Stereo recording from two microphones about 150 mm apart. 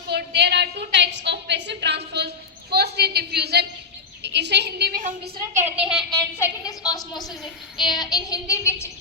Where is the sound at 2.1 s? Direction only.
90° right.